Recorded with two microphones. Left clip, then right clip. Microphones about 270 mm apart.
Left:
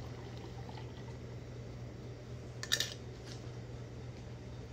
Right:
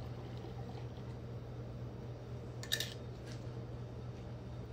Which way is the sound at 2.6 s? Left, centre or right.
Centre.